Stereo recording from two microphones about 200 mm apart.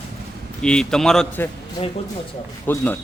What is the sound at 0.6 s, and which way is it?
Speech, 5° left (ahead or behind).